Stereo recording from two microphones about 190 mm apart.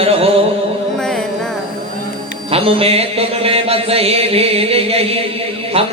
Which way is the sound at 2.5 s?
30° right (ahead or behind).